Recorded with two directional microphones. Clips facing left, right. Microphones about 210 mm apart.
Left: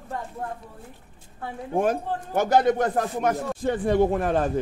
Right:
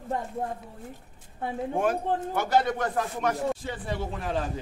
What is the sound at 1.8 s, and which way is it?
Speech, 45° left (ahead or behind).